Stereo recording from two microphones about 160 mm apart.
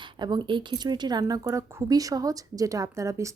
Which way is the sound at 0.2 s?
25° right (ahead or behind).